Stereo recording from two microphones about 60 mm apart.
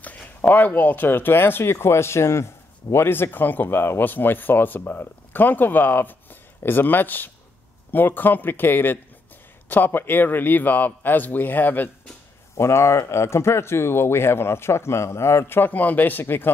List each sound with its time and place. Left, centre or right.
0.0 s speech: left
12.5 s speech: left